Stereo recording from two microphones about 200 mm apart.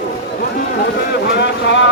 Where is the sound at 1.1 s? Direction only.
55° left (ahead or behind).